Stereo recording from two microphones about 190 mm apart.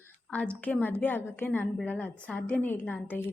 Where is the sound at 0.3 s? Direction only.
5° left (ahead or behind).